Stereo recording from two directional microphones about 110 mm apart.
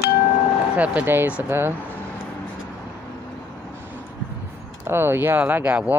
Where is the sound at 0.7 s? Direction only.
15° right (ahead or behind).